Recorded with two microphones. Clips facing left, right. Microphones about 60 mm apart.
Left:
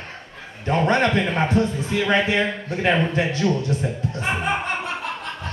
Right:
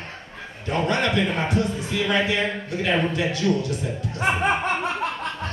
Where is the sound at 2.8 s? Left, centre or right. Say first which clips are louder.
Left 3 dB; left.